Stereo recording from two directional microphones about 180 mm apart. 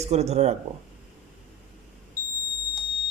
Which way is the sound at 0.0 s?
35° right (ahead or behind).